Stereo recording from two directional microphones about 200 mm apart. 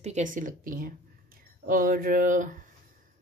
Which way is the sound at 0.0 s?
35° right (ahead or behind).